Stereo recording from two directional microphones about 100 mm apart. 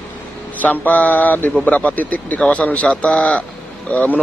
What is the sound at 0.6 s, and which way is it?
Speech, 15° left (ahead or behind).